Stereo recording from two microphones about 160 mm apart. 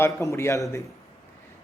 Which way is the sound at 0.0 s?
20° left (ahead or behind).